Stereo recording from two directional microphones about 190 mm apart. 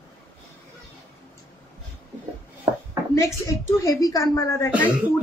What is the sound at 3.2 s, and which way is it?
A woman's voice, 15° left (ahead or behind).